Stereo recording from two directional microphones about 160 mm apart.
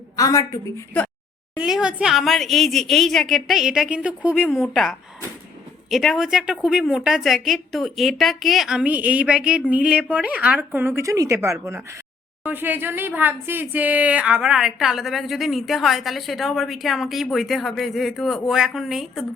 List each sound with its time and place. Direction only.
0.2 s a woman's voice: 20° left (ahead or behind)
1.5 s a woman's voice: 5° right (ahead or behind)